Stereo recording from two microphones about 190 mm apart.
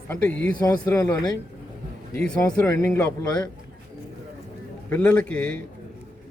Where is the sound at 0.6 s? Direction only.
20° left (ahead or behind).